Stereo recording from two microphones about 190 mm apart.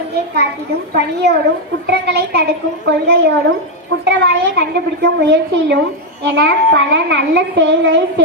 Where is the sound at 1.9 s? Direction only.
60° right (ahead or behind).